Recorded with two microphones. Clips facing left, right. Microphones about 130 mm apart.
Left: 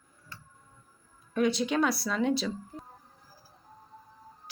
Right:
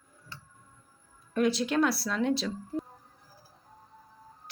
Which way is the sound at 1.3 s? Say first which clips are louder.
Even; centre (ahead or behind).